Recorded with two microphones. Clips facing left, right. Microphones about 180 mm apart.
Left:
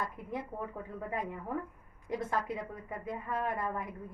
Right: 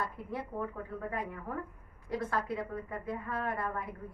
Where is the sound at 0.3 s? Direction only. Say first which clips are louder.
Right 1 dB; 15° left (ahead or behind).